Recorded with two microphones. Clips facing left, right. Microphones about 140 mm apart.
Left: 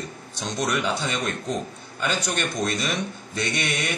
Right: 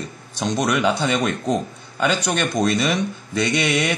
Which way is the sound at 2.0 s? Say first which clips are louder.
Right 6 dB; 90° right.